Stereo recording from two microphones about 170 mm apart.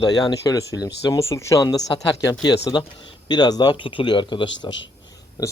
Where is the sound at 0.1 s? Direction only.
25° left (ahead or behind).